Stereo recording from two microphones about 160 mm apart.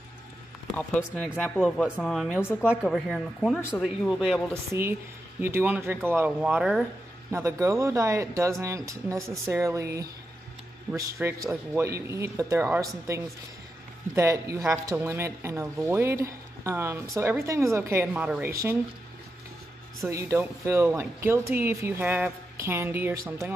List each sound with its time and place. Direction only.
0.7 s speech: 10° left (ahead or behind)
2.7 s speech: 5° right (ahead or behind)
5.4 s speech: 10° right (ahead or behind)
7.2 s speech: 20° right (ahead or behind)
20.1 s speech: 15° right (ahead or behind)